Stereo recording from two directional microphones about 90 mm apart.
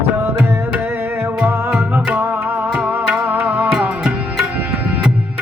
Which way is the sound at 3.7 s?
10° right (ahead or behind).